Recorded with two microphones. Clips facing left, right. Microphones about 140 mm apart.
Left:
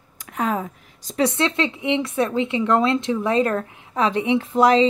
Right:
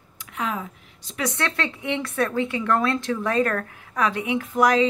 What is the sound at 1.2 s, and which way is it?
Speech, 20° left (ahead or behind).